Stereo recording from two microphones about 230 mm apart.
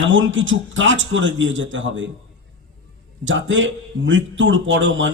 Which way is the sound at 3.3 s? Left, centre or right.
Right.